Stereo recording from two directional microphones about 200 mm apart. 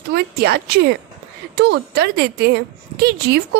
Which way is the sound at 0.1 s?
55° right (ahead or behind).